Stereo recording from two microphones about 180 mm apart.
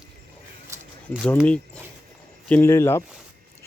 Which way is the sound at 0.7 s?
15° right (ahead or behind).